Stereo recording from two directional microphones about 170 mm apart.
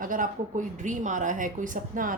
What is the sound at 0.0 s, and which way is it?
Speech, 50° right (ahead or behind).